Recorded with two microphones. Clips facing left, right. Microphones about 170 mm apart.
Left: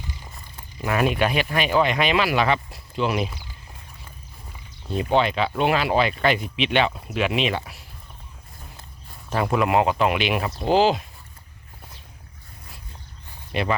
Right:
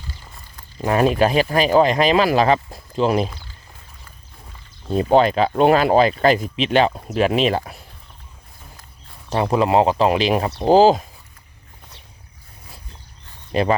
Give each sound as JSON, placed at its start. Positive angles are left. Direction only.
{"t": 0.8, "sound": "speech", "side_deg": -35}
{"t": 3.2, "sound": "speech", "side_deg": 15}
{"t": 4.9, "sound": "speech", "side_deg": -40}
{"t": 9.3, "sound": "speech", "side_deg": -30}
{"t": 13.5, "sound": "speech", "side_deg": -35}